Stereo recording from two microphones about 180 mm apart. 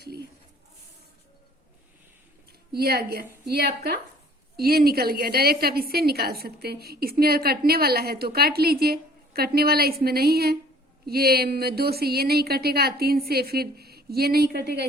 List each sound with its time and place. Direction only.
2.5 s a woman's voice: 60° right (ahead or behind)